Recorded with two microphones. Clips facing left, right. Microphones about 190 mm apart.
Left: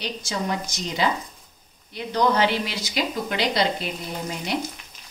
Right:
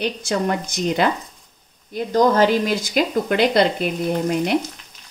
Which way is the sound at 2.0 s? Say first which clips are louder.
Right 6 dB; 45° right (ahead or behind).